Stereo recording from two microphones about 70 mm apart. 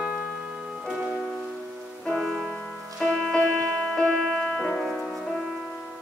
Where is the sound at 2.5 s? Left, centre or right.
Centre.